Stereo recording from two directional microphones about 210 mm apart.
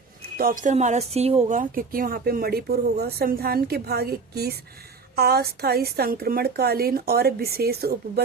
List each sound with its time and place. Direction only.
0.3 s speech: 40° right (ahead or behind)